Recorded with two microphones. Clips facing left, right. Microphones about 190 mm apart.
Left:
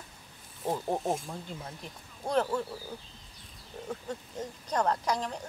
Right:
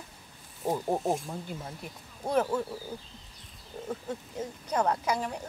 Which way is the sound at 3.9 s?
5° right (ahead or behind).